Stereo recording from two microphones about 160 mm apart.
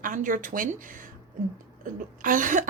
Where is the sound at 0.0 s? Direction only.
55° right (ahead or behind).